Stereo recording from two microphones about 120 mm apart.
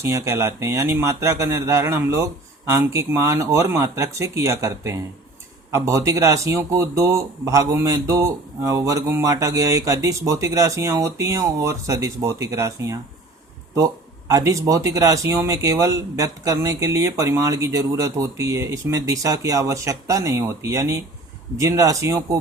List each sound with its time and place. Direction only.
0.0 s speech: 25° right (ahead or behind)